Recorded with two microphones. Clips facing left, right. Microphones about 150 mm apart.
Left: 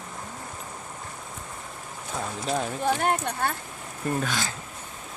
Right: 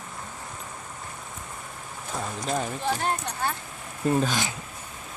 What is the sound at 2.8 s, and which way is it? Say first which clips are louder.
Speech: left 3 dB; 55° left (ahead or behind).